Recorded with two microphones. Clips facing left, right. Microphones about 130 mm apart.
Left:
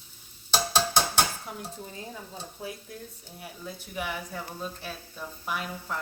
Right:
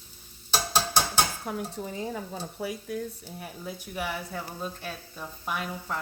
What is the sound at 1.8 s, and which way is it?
Stir, 80° right.